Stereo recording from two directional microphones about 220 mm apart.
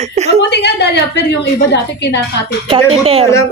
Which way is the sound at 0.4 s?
50° left (ahead or behind).